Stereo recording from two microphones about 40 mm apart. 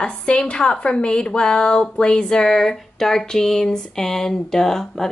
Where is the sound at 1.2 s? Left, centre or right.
Left.